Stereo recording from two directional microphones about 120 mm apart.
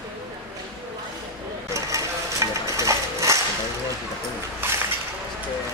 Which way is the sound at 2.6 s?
25° right (ahead or behind).